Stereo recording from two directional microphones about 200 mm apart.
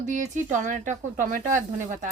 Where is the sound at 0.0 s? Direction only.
40° right (ahead or behind).